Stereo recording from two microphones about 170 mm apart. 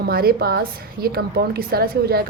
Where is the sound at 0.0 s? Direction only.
65° right (ahead or behind).